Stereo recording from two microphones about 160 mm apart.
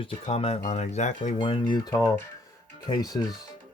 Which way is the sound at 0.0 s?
35° left (ahead or behind).